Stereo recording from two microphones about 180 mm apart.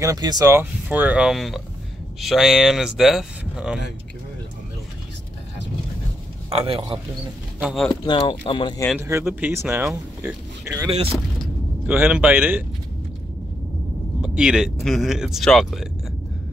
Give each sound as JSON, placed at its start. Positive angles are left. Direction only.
{"t": 0.0, "sound": "speech", "side_deg": -20}
{"t": 0.8, "sound": "speech", "side_deg": -5}
{"t": 6.5, "sound": "a man's voice", "side_deg": -30}
{"t": 7.6, "sound": "speech", "side_deg": 0}
{"t": 7.9, "sound": "speech", "side_deg": 25}
{"t": 8.9, "sound": "speech", "side_deg": -15}
{"t": 14.2, "sound": "speech", "side_deg": -5}